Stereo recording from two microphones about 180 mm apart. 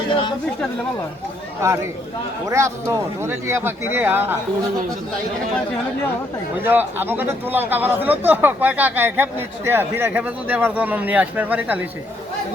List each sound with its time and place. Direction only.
0.1 s speech: 25° left (ahead or behind)
1.6 s speech: 15° right (ahead or behind)
6.6 s speech: 10° right (ahead or behind)